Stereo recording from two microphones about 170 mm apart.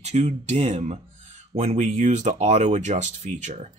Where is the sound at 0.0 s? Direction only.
40° right (ahead or behind).